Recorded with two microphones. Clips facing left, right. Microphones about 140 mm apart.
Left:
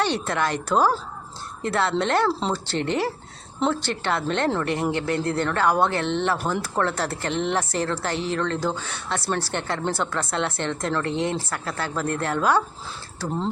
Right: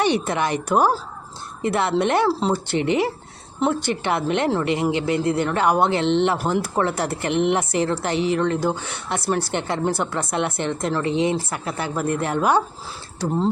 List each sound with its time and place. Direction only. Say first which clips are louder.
0.0 s speech: right 3 dB; 15° right (ahead or behind)